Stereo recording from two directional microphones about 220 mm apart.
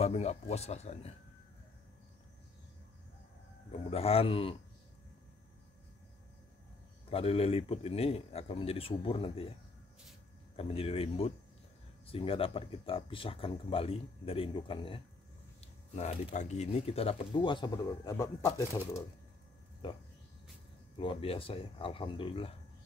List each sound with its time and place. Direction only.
0.0 s speech: 30° left (ahead or behind)
3.7 s speech: 25° left (ahead or behind)
7.1 s speech: 25° left (ahead or behind)
10.5 s speech: 25° left (ahead or behind)
19.8 s speech: 20° left (ahead or behind)
21.0 s speech: 25° left (ahead or behind)